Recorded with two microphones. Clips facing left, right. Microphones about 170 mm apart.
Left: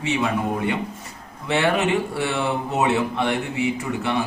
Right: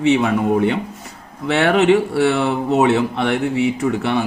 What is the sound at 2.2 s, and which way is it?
Speech, 65° right (ahead or behind).